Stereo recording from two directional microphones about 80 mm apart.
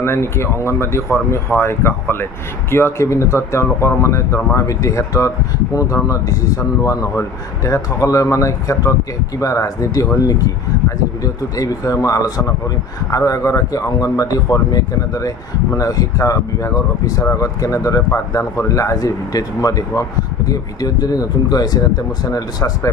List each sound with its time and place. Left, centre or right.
0.0 s speech: left